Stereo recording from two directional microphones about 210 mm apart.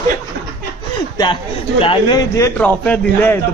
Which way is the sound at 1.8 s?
20° left (ahead or behind).